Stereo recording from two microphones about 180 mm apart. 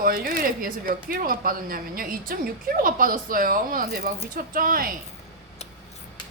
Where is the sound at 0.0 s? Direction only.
55° right (ahead or behind).